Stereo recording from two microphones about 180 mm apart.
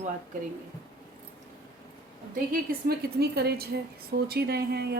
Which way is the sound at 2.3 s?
50° right (ahead or behind).